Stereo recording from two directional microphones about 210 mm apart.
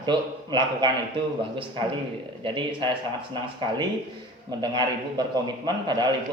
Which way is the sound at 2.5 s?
20° right (ahead or behind).